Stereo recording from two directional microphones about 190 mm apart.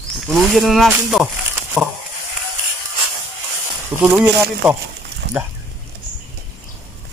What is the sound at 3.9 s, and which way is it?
Speech, 5° right (ahead or behind).